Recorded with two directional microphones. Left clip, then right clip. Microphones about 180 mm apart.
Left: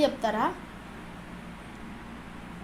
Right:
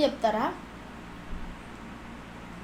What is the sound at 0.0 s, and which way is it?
Speech, centre (ahead or behind).